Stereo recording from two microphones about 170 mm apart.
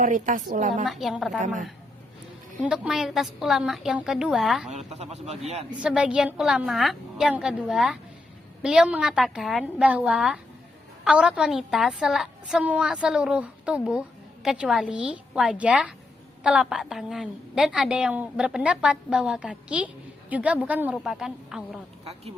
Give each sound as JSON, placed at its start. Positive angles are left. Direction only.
{"t": 0.0, "sound": "a woman's voice", "side_deg": -50}
{"t": 0.9, "sound": "a woman's voice", "side_deg": 0}
{"t": 2.6, "sound": "a woman's voice", "side_deg": -5}
{"t": 5.1, "sound": "a man's voice", "side_deg": -40}
{"t": 5.7, "sound": "a woman's voice", "side_deg": -5}